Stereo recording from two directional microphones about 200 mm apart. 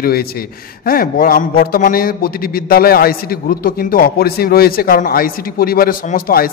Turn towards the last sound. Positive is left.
turn(degrees=45)  # may be behind; listen again after turning